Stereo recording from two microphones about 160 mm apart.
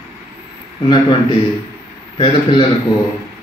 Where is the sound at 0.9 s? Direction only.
30° left (ahead or behind).